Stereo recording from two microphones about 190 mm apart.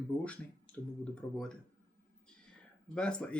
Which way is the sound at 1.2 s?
10° left (ahead or behind).